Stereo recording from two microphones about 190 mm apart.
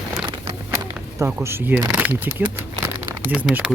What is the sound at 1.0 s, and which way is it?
Speech, 15° right (ahead or behind).